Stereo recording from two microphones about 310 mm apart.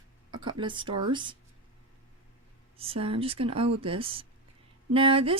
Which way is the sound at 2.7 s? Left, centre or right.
Centre.